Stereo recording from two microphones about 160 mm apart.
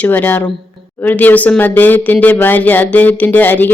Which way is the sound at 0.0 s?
10° left (ahead or behind).